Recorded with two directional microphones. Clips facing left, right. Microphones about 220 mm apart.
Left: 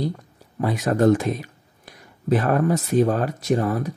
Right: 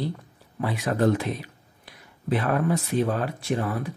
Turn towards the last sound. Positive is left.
turn(degrees=40)  # may be behind; listen again after turning